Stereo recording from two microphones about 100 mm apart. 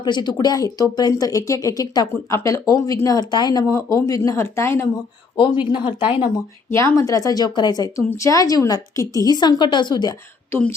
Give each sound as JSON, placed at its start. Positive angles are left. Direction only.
{"t": 0.0, "sound": "a woman's voice", "side_deg": 45}
{"t": 5.4, "sound": "speech", "side_deg": 50}
{"t": 6.0, "sound": "speech", "side_deg": -20}
{"t": 6.7, "sound": "a woman's voice", "side_deg": 30}
{"t": 10.5, "sound": "speech", "side_deg": 20}